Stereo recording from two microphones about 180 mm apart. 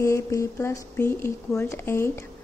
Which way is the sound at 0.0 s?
15° left (ahead or behind).